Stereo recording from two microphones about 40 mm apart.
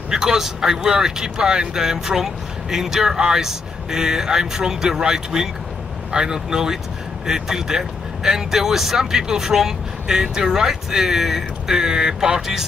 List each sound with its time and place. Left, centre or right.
0.1 s speech: centre